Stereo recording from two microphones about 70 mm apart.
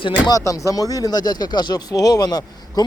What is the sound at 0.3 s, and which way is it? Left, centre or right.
Speech, left.